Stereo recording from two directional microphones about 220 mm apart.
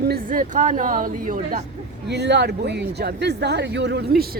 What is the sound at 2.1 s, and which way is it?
Speech, 50° right (ahead or behind).